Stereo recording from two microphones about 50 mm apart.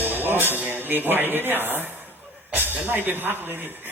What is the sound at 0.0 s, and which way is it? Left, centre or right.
Music, right.